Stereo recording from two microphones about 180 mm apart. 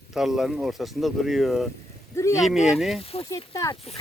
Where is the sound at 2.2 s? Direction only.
15° left (ahead or behind).